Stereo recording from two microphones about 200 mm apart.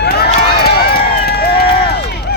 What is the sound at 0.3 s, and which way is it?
Run, 50° left (ahead or behind).